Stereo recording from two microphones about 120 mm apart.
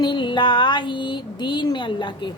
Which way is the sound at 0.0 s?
40° left (ahead or behind).